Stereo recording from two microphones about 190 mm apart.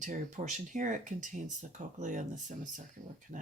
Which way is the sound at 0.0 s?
40° right (ahead or behind).